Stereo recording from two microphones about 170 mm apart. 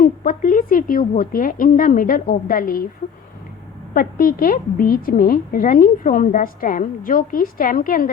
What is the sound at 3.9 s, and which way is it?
A woman's voice, 55° left (ahead or behind).